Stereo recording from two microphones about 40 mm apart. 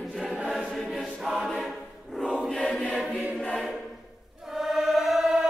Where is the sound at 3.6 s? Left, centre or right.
Centre.